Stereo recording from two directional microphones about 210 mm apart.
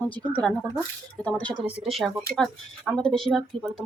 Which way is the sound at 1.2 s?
5° left (ahead or behind).